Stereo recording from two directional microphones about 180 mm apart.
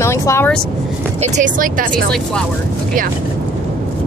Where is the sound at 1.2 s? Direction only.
45° right (ahead or behind).